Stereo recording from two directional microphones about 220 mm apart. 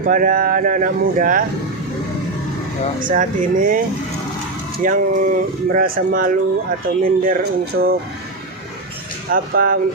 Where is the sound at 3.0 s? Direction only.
35° right (ahead or behind).